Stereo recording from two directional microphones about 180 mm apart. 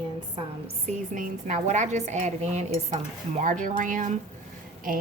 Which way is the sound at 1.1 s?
45° right (ahead or behind).